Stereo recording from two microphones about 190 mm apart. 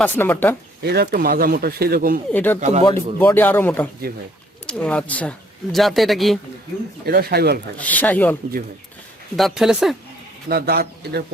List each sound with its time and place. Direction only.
0.0 s speech: 10° left (ahead or behind)
0.8 s speech: 60° right (ahead or behind)
2.3 s speech: 10° left (ahead or behind)
2.6 s speech: 35° right (ahead or behind)
3.2 s speech: 10° left (ahead or behind)
4.1 s speech: 50° right (ahead or behind)
4.6 s speech: 5° left (ahead or behind)
7.0 s a man's voice: 55° right (ahead or behind)
7.8 s speech: 10° left (ahead or behind)
10.5 s a man's voice: 55° right (ahead or behind)